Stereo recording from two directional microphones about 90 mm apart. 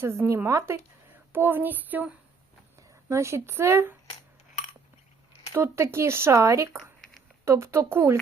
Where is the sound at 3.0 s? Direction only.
35° right (ahead or behind).